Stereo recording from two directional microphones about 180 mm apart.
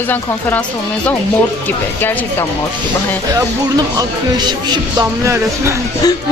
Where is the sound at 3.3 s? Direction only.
20° right (ahead or behind).